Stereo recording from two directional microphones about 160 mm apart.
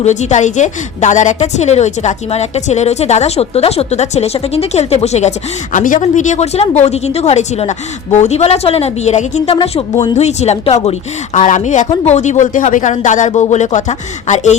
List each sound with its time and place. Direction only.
0.0 s a woman's voice: 45° left (ahead or behind)
5.7 s a woman's voice: 55° left (ahead or behind)